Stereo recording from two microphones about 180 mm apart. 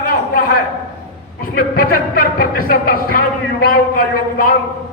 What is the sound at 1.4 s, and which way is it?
Speech, 55° left (ahead or behind).